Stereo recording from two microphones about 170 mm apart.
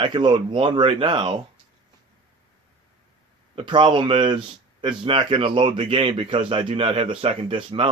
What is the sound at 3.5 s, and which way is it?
Speech, 30° right (ahead or behind).